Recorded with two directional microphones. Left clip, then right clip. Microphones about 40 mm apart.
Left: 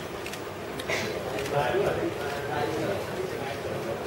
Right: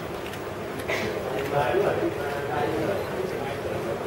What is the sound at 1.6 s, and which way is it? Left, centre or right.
Speech, left.